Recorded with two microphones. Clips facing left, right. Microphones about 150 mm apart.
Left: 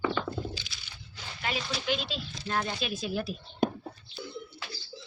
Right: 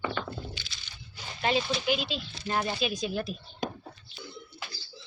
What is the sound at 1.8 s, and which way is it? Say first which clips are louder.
Speech: right 2 dB; 10° right (ahead or behind).